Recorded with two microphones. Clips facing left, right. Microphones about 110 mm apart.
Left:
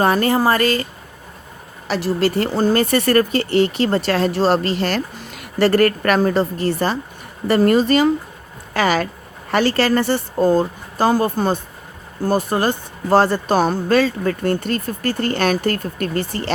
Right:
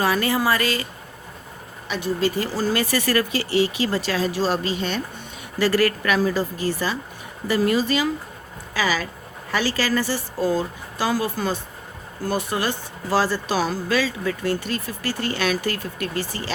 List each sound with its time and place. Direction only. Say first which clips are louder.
0.0 s speech: left 5 dB; 50° left (ahead or behind)
1.9 s speech: left 5 dB; 75° left (ahead or behind)
5.5 s speech: left 5 dB; 55° left (ahead or behind)